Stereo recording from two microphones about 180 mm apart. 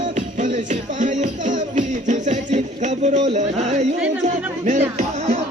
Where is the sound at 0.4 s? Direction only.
45° right (ahead or behind).